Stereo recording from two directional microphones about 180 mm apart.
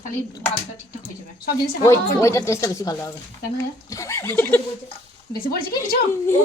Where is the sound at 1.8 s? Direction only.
15° left (ahead or behind).